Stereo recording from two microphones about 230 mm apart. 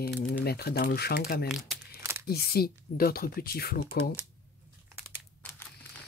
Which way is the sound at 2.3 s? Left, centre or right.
Left.